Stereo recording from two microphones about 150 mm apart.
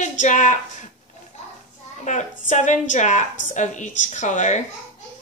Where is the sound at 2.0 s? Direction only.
55° left (ahead or behind).